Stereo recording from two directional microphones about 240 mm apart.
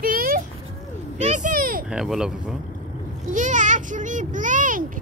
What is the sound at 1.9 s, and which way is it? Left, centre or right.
Speech, centre.